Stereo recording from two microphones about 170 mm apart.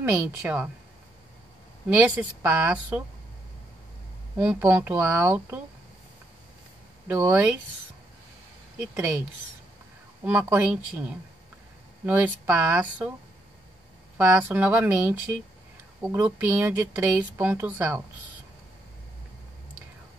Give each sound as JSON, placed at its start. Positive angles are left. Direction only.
{"t": 0.0, "sound": "speech", "side_deg": -10}
{"t": 1.9, "sound": "speech", "side_deg": -10}
{"t": 4.4, "sound": "speech", "side_deg": -10}
{"t": 7.1, "sound": "speech", "side_deg": -15}
{"t": 8.7, "sound": "speech", "side_deg": -10}
{"t": 10.2, "sound": "speech", "side_deg": -10}
{"t": 14.1, "sound": "speech", "side_deg": -10}